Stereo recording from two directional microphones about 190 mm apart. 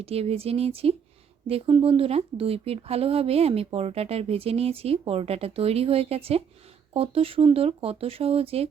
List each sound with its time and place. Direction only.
0.0 s speech: 30° right (ahead or behind)